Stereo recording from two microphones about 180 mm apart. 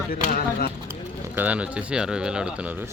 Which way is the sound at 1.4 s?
10° right (ahead or behind).